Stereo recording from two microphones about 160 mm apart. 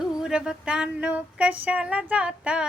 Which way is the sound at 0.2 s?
5° right (ahead or behind).